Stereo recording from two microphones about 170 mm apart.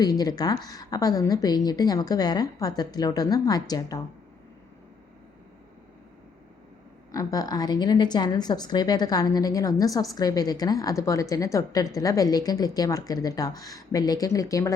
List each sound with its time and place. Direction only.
0.0 s a woman's voice: 20° left (ahead or behind)
7.1 s a woman's voice: 20° left (ahead or behind)